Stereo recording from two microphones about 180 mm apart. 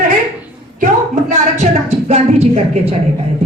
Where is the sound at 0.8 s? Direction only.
40° right (ahead or behind).